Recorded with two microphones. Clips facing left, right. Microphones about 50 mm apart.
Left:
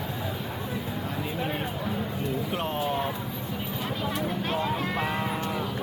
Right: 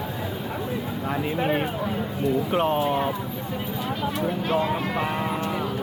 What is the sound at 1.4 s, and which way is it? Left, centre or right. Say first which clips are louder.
Speech: right 7 dB; right.